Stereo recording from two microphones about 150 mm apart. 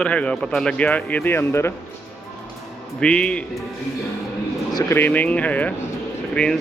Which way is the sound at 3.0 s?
5° left (ahead or behind).